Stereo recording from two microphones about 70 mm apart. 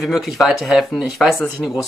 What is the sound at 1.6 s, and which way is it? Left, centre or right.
Speech, centre.